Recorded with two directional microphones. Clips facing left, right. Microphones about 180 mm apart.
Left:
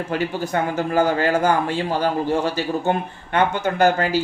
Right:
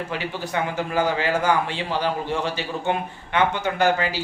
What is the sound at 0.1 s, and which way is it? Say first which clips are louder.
A man's voice: left 5 dB; 45° left (ahead or behind).